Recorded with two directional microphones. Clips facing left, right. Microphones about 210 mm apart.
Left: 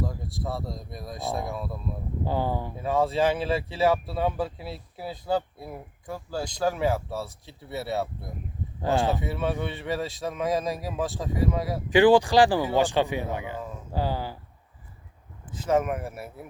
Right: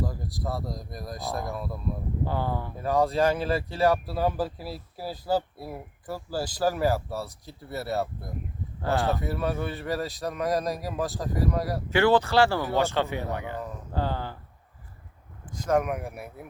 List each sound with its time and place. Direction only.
0.0 s speech: centre (ahead or behind)
2.2 s speech: 15° left (ahead or behind)
2.8 s speech: centre (ahead or behind)
8.8 s speech: 15° left (ahead or behind)
9.1 s speech: centre (ahead or behind)
11.9 s speech: 15° left (ahead or behind)
15.5 s speech: 5° left (ahead or behind)